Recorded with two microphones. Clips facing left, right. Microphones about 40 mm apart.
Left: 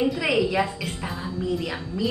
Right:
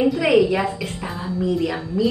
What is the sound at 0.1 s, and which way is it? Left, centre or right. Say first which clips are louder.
A woman's voice: right 6 dB; centre.